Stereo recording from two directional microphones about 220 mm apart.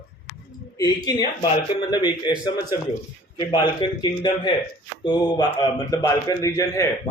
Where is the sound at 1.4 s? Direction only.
20° left (ahead or behind).